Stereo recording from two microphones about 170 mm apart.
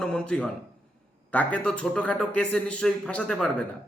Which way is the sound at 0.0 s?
5° left (ahead or behind).